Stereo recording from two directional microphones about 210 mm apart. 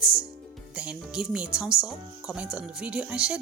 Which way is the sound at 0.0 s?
5° right (ahead or behind).